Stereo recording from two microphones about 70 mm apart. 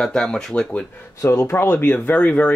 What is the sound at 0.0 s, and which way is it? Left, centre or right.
Speech, centre.